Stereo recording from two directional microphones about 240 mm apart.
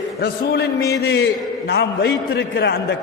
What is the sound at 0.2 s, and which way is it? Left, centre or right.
A man's voice, left.